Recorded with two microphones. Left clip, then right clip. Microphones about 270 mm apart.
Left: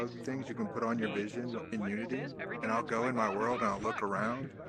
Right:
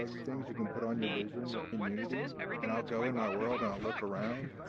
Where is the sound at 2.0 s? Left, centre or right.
Centre.